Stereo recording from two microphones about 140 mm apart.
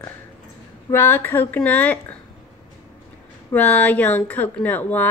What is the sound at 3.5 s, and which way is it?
Speech, 15° left (ahead or behind).